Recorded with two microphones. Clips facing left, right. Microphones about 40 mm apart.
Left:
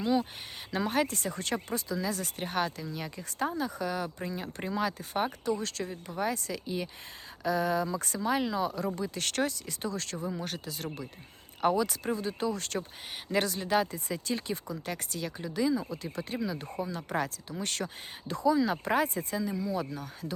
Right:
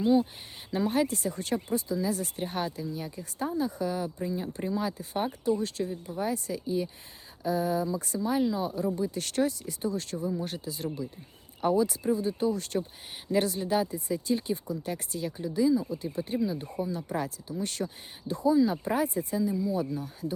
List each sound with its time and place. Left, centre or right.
0.0 s speech: left